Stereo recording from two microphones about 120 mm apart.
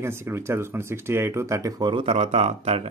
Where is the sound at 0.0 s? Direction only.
20° right (ahead or behind); by 2.0 s 40° right (ahead or behind).